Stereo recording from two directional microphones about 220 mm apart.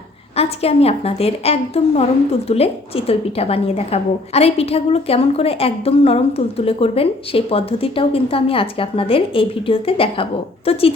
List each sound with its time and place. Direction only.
0.3 s a woman's voice: 25° left (ahead or behind)